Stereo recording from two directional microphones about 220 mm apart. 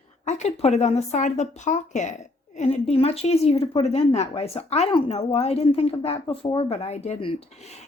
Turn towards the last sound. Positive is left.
turn(degrees=25)  # may be behind; listen again after turning